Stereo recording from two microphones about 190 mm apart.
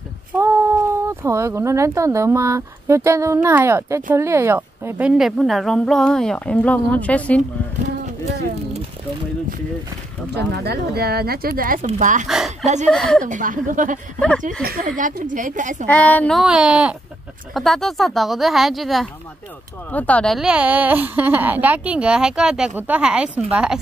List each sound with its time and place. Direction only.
0.3 s speech: 10° right (ahead or behind); by 7.4 s 5° left (ahead or behind)
10.3 s speech: 60° right (ahead or behind); by 12.3 s 40° right (ahead or behind)
12.3 s speech: centre (ahead or behind)
13.2 s a woman's voice: 45° right (ahead or behind)
15.9 s speech: 10° left (ahead or behind)